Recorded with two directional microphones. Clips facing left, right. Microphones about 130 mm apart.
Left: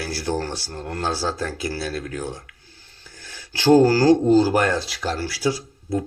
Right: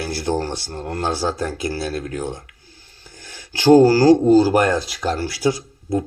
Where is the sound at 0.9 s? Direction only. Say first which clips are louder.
Right 3 dB; 15° right (ahead or behind).